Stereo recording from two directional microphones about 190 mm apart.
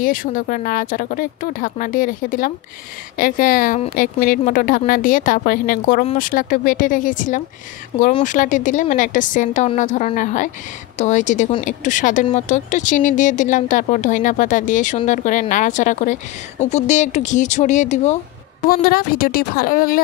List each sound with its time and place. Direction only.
0.0 s speech: 45° left (ahead or behind)
18.7 s speech: 50° left (ahead or behind)